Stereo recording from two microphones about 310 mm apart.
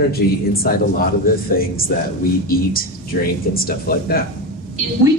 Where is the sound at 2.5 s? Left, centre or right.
Left.